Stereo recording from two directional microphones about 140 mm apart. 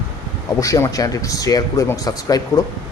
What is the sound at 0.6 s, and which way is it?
Speech, 25° left (ahead or behind).